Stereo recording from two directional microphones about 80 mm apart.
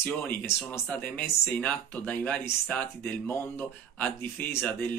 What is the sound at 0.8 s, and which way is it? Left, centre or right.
Speech, centre.